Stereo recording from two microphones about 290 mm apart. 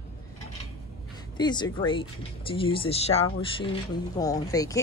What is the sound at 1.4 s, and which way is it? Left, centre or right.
Speech, centre.